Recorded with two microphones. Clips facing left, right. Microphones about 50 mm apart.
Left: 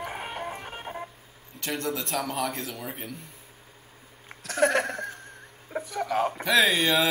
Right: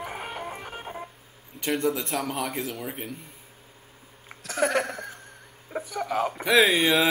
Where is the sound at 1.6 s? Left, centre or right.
Centre.